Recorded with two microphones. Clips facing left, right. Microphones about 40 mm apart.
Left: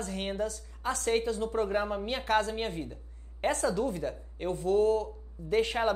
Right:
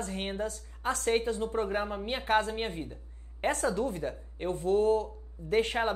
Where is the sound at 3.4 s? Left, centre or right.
Right.